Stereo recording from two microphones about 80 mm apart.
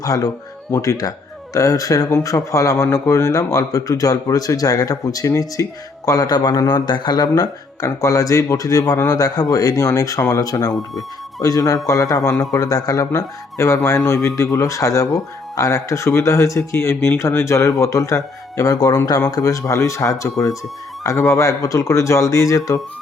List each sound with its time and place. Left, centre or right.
0.0 s a man's voice: left
6.1 s a man's voice: left